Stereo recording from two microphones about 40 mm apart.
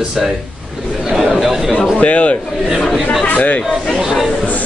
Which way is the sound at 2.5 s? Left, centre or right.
Centre.